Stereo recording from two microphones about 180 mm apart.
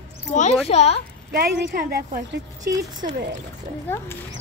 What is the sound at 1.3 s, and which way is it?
A woman's voice, 55° right (ahead or behind).